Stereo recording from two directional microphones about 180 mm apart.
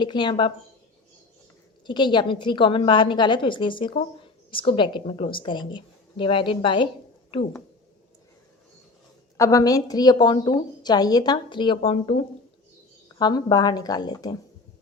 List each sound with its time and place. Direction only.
0.0 s a woman's voice: 25° left (ahead or behind)
1.9 s a woman's voice: 25° left (ahead or behind)
9.4 s a woman's voice: 20° left (ahead or behind)